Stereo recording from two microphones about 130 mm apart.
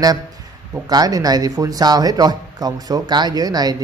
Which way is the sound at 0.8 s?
30° right (ahead or behind).